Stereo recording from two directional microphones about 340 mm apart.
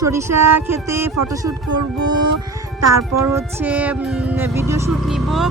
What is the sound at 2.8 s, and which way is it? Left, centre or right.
Speech, right.